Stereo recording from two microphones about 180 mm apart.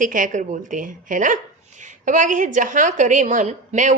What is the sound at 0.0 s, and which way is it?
A woman's voice, 45° right (ahead or behind).